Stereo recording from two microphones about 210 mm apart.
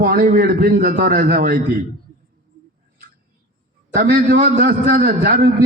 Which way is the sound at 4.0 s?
45° right (ahead or behind).